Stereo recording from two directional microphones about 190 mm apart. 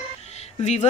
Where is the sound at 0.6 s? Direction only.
35° left (ahead or behind).